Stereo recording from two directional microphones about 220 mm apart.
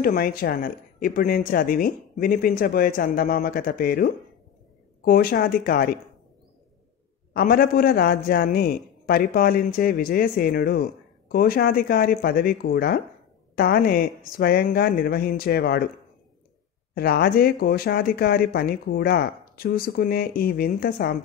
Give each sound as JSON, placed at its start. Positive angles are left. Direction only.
{"t": 0.0, "sound": "speech", "side_deg": 40}
{"t": 7.3, "sound": "speech", "side_deg": 40}
{"t": 16.9, "sound": "speech", "side_deg": 45}